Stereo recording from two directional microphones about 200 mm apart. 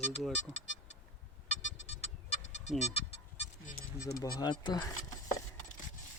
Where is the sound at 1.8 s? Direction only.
35° left (ahead or behind).